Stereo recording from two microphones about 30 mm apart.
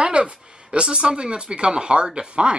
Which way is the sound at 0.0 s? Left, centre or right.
Right.